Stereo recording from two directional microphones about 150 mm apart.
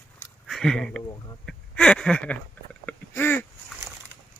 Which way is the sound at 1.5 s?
5° left (ahead or behind).